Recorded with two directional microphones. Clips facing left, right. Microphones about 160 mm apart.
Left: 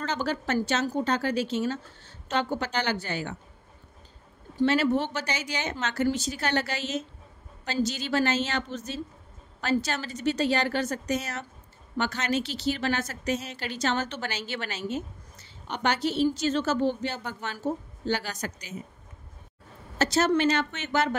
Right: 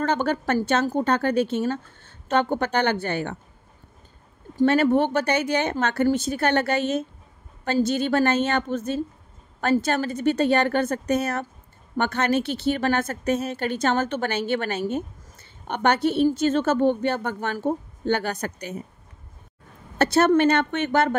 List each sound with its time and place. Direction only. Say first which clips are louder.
0.0 s a woman's voice: right 6 dB; 55° right (ahead or behind)
4.6 s a woman's voice: right 5 dB; 50° right (ahead or behind)
20.0 s a woman's voice: right 5 dB; 60° right (ahead or behind)